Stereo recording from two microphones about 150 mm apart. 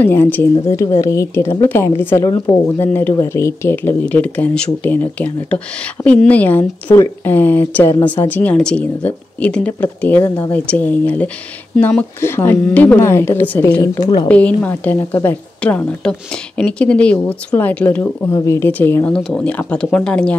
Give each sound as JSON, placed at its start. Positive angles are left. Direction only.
{"t": 0.0, "sound": "a woman's voice", "side_deg": 15}